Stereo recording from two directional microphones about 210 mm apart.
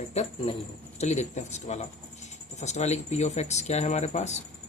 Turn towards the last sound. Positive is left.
turn(degrees=35)  # may be behind; listen again after turning